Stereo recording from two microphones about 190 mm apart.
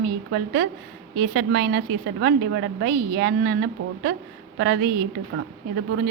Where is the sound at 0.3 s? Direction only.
60° right (ahead or behind).